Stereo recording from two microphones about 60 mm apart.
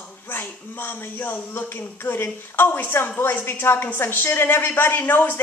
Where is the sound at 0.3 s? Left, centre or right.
Left.